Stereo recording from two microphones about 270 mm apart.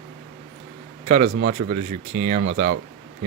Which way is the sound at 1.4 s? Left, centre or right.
Right.